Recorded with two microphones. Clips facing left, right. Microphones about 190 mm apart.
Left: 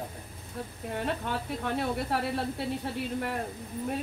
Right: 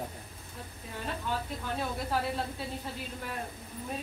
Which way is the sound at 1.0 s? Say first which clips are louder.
Left 3 dB; 65° left (ahead or behind).